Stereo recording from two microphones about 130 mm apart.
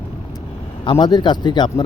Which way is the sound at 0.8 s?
35° left (ahead or behind).